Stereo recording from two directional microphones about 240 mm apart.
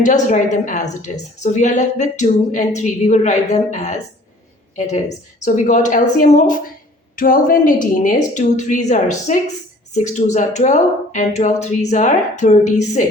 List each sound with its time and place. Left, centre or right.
0.0 s a woman's voice: left